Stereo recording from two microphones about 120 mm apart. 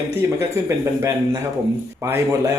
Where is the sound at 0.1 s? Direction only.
20° right (ahead or behind).